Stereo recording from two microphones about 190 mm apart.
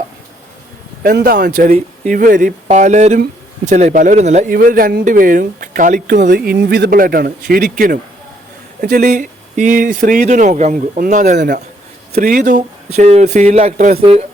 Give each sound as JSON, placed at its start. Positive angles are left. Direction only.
{"t": 1.0, "sound": "speech", "side_deg": -50}
{"t": 4.5, "sound": "speech", "side_deg": -50}
{"t": 6.1, "sound": "speech", "side_deg": -60}